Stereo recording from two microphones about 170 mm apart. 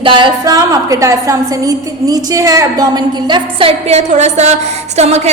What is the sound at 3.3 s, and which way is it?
A woman's voice, 30° right (ahead or behind).